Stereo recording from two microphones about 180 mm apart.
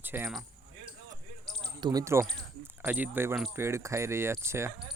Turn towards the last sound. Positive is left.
turn(degrees=-15)  # may be behind; listen again after turning